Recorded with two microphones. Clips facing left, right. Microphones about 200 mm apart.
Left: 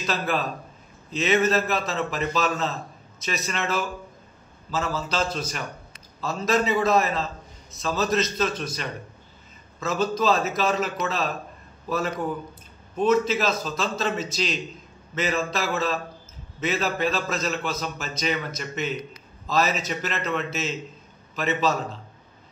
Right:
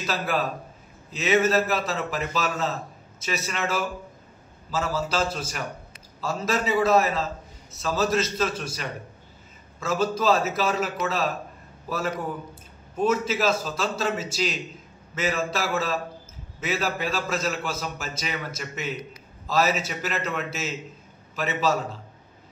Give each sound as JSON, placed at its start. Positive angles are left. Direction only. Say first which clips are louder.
{"t": 0.0, "sound": "a man's voice", "louder": "even", "side_deg": -5}